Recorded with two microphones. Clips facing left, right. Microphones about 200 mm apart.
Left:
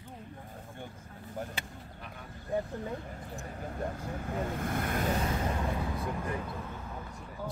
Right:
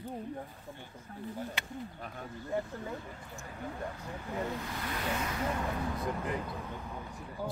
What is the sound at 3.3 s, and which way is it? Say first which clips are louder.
Speech: left 1 dB; 35° left (ahead or behind).